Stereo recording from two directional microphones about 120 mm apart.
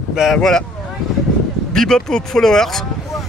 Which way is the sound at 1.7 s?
5° left (ahead or behind).